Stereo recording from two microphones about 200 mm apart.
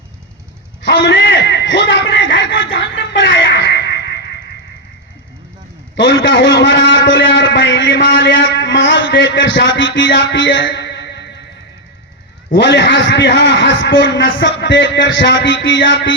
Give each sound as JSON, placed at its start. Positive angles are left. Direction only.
{"t": 0.8, "sound": "a sound", "side_deg": 65}
{"t": 6.0, "sound": "a man's voice", "side_deg": 65}
{"t": 12.5, "sound": "a man's voice", "side_deg": 60}